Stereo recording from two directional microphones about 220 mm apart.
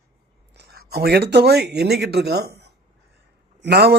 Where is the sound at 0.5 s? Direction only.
50° right (ahead or behind).